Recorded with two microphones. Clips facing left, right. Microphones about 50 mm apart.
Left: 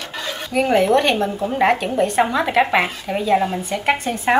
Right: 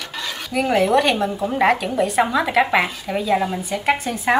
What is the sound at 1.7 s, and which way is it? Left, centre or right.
Speech, left.